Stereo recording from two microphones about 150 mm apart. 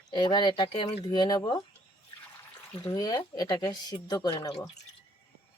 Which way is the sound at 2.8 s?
25° left (ahead or behind).